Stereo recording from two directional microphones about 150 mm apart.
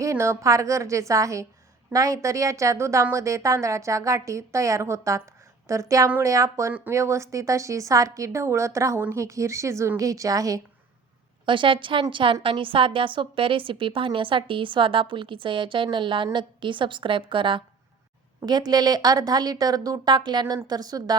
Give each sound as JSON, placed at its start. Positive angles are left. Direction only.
{"t": 0.0, "sound": "a woman's voice", "side_deg": -20}
{"t": 11.4, "sound": "a woman's voice", "side_deg": -35}